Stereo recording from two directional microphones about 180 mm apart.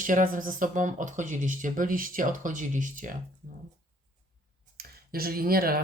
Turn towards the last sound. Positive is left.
turn(degrees=-55)  # may be behind; listen again after turning